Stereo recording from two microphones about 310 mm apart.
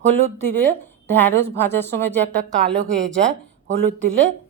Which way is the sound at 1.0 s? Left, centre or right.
Centre.